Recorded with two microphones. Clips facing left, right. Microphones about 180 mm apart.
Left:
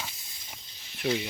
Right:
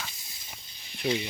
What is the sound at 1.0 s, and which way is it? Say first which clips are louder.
Speech: even; 10° right (ahead or behind).